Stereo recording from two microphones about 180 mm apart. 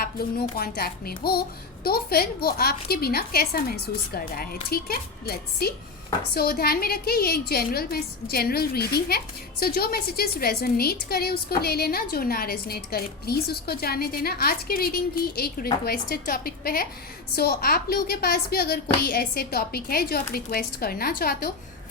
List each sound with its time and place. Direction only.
0.0 s a woman's voice: 55° left (ahead or behind)